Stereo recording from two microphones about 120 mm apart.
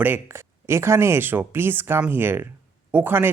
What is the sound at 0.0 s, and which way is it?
Speech, 20° right (ahead or behind).